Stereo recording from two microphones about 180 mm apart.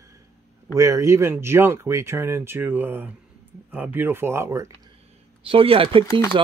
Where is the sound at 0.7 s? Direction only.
15° right (ahead or behind).